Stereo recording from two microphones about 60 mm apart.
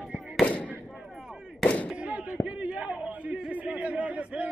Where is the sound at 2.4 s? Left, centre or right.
Centre.